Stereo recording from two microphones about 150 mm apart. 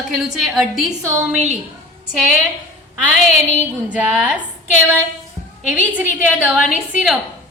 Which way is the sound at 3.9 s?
10° right (ahead or behind).